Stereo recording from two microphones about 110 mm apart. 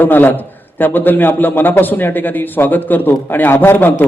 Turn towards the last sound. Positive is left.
turn(degrees=15)  # may be behind; listen again after turning